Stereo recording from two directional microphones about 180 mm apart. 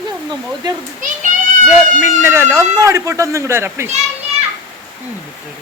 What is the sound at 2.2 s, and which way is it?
A man's voice, 15° right (ahead or behind).